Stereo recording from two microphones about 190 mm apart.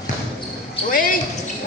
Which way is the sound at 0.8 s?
45° left (ahead or behind).